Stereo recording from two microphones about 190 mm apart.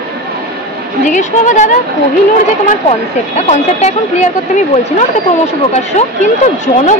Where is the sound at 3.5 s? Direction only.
35° left (ahead or behind).